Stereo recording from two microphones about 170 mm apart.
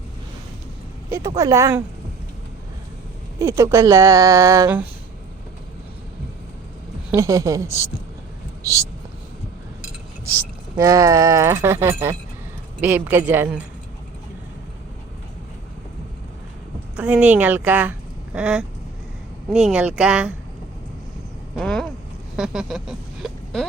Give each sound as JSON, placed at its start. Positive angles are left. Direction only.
{"t": 1.4, "sound": "a woman's voice", "side_deg": -20}
{"t": 3.3, "sound": "a woman's voice", "side_deg": -15}
{"t": 7.1, "sound": "a woman's voice", "side_deg": -15}
{"t": 10.8, "sound": "a woman's voice", "side_deg": -20}
{"t": 17.0, "sound": "a woman's voice", "side_deg": -5}
{"t": 21.5, "sound": "a sound", "side_deg": 0}